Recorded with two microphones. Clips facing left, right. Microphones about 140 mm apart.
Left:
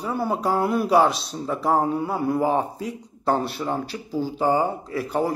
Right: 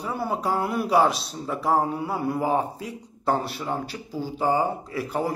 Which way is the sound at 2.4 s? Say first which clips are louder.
Left 2 dB; 45° left (ahead or behind).